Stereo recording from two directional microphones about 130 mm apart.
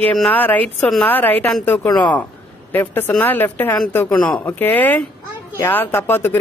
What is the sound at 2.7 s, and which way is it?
Speech, 15° left (ahead or behind).